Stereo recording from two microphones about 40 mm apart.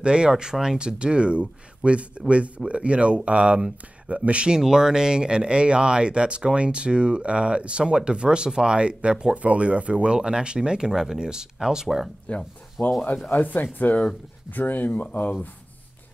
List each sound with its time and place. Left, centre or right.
0.0 s speech: right
4.6 s speech: centre
9.3 s speech: right; by 12.1 s centre
12.3 s speech: left
12.8 s speech: left